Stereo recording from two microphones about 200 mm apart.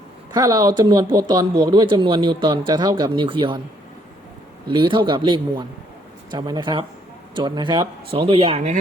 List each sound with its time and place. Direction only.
0.3 s speech: 20° right (ahead or behind)
4.7 s speech: 20° right (ahead or behind)